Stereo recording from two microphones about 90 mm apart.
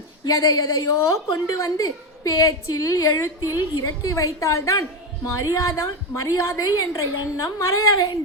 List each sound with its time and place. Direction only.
0.3 s a woman's voice: 40° left (ahead or behind)